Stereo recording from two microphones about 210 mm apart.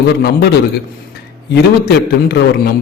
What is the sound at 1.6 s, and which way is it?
A man's voice, 50° left (ahead or behind).